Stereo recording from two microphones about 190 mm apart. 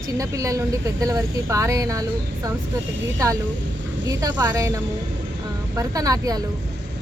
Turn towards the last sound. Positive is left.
turn(degrees=-20)  # may be behind; listen again after turning